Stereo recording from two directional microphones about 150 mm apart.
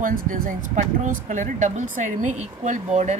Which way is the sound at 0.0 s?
60° right (ahead or behind).